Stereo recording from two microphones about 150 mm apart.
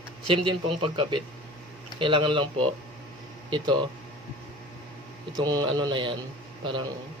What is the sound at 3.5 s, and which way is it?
Speech, 30° right (ahead or behind).